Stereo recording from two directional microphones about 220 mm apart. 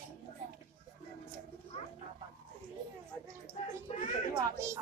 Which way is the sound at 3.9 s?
30° left (ahead or behind).